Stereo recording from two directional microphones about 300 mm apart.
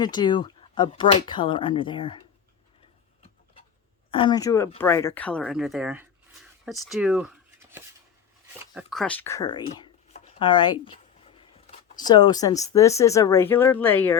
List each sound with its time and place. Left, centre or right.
0.0 s speech: centre
4.1 s speech: centre
8.5 s a sound: centre
11.9 s speech: centre